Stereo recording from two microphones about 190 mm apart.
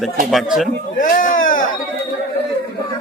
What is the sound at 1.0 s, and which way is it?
Speech, 45° left (ahead or behind).